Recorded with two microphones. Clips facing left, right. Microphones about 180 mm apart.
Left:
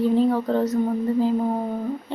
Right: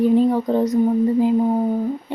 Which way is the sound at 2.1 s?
15° right (ahead or behind).